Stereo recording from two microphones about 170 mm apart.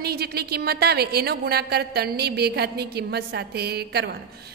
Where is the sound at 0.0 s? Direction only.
65° right (ahead or behind).